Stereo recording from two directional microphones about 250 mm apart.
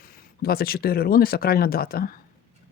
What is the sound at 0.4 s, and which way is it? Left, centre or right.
Speech, left.